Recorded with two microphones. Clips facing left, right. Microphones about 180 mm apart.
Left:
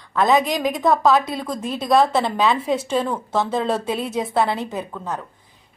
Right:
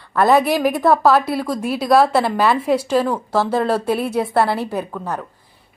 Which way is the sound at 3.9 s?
60° right (ahead or behind).